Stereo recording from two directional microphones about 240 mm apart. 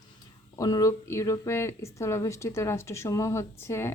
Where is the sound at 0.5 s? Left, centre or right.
Centre.